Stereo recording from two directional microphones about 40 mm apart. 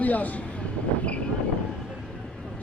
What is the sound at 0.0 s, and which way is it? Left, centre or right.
Speech, left.